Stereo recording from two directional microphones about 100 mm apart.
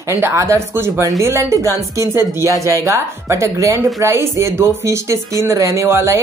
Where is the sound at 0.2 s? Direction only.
30° right (ahead or behind).